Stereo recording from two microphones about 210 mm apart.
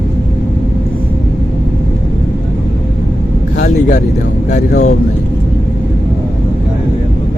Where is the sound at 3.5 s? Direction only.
35° left (ahead or behind).